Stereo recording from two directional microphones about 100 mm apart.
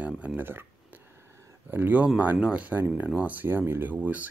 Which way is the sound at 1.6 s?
20° right (ahead or behind).